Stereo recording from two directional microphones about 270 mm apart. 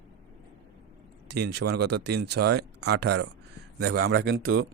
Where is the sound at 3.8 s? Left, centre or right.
Right.